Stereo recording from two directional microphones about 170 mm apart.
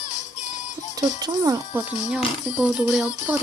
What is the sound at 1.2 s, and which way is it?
Speech, 20° right (ahead or behind).